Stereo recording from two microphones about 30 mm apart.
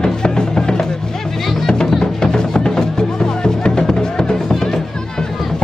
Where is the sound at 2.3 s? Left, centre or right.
Left.